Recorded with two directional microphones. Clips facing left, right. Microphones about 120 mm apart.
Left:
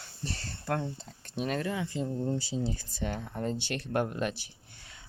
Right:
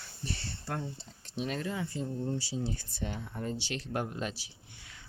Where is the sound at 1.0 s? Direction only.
55° left (ahead or behind); by 3.1 s 90° left.